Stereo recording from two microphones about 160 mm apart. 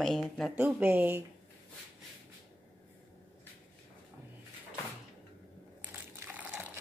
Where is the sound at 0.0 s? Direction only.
Centre (ahead or behind).